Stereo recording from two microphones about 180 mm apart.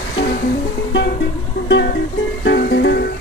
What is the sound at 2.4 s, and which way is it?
Music, 65° left (ahead or behind).